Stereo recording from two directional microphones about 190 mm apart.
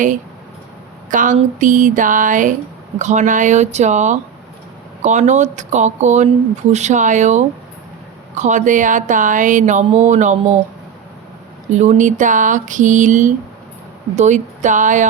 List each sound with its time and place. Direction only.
1.1 s speech: 45° right (ahead or behind)
11.7 s speech: 40° right (ahead or behind)